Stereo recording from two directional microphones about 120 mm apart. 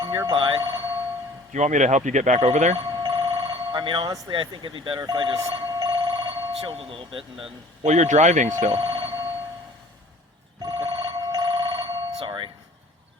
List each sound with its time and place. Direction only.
0.0 s a sound: 35° right (ahead or behind)
1.5 s speech: 80° right
2.7 s speech: 40° right (ahead or behind)
5.5 s telephone bell ringing: 40° right (ahead or behind)
7.9 s speech: 80° right
8.7 s speech: 40° right (ahead or behind)
10.6 s telephone bell ringing: 40° right (ahead or behind)